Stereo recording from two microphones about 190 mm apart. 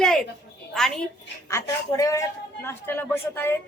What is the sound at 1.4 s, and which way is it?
A woman's voice, 15° left (ahead or behind).